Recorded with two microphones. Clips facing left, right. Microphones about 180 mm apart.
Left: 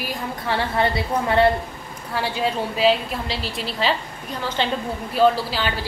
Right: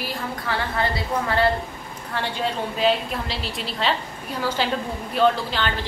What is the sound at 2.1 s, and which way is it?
A woman's voice, 10° left (ahead or behind).